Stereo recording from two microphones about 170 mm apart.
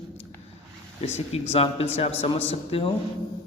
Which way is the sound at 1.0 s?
35° left (ahead or behind).